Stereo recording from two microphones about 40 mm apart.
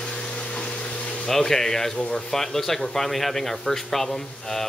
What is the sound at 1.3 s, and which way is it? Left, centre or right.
Speech, centre.